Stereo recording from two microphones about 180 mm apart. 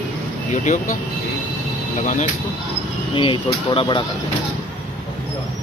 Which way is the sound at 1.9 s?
45° left (ahead or behind).